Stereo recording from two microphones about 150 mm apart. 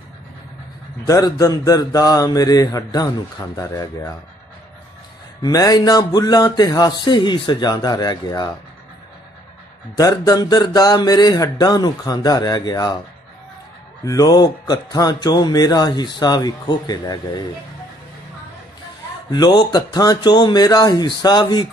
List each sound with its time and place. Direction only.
1.0 s speech: 25° left (ahead or behind)
5.4 s speech: 25° left (ahead or behind)
9.9 s speech: 25° left (ahead or behind)
14.0 s speech: 25° left (ahead or behind)
19.3 s speech: 30° left (ahead or behind)